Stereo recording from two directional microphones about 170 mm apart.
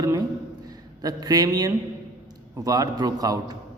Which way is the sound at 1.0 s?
20° right (ahead or behind).